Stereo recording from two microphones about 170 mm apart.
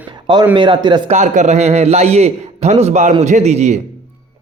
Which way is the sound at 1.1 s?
45° right (ahead or behind).